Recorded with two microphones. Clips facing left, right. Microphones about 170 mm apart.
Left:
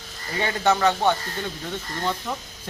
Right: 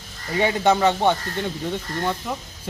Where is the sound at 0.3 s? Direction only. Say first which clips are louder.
Right 3 dB; 15° right (ahead or behind).